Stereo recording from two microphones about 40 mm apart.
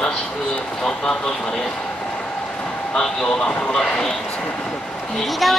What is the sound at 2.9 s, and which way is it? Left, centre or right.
A man's voice, centre.